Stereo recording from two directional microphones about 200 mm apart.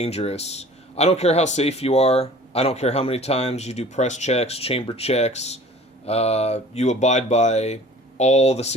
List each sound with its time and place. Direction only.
0.0 s a man's voice: 30° left (ahead or behind)